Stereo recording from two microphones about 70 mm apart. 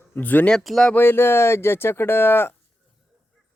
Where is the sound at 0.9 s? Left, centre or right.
Left.